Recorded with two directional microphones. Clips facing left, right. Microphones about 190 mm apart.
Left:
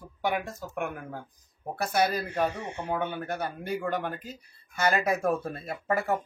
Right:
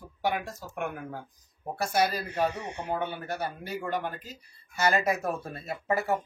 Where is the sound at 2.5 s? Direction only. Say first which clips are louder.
Left 1 dB; 20° right (ahead or behind).